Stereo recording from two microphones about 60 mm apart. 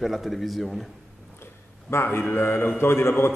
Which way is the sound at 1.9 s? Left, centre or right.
Left.